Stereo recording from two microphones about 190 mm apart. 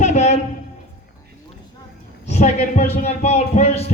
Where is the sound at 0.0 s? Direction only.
35° left (ahead or behind).